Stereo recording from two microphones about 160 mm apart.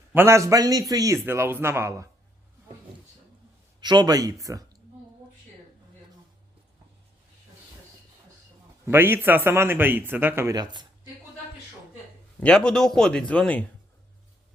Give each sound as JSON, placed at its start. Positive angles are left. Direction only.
{"t": 0.1, "sound": "a man's voice", "side_deg": -15}
{"t": 3.8, "sound": "speech", "side_deg": -25}
{"t": 8.9, "sound": "speech", "side_deg": -15}
{"t": 12.4, "sound": "a man's voice", "side_deg": 5}